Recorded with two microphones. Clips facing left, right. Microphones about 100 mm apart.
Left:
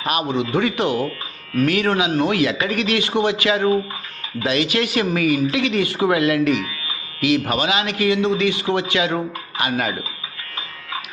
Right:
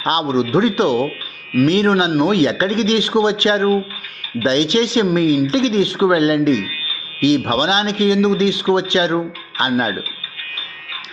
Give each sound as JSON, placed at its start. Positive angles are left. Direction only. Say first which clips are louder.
{"t": 0.0, "sound": "speech", "louder": "right 4 dB", "side_deg": -25}